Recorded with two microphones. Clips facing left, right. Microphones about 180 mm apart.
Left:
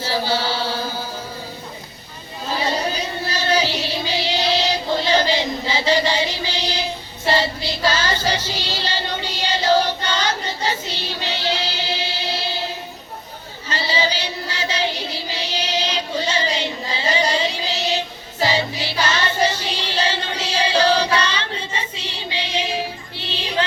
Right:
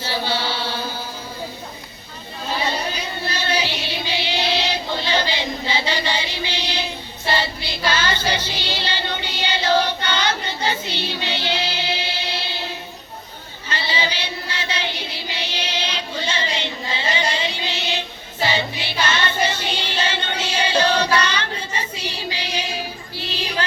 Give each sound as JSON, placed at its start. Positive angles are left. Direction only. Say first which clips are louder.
{"t": 0.0, "sound": "chant", "louder": "left 2 dB", "side_deg": 40}
{"t": 2.6, "sound": "child singing", "louder": "left 3 dB", "side_deg": 40}
{"t": 13.7, "sound": "child singing", "louder": "left 3 dB", "side_deg": 35}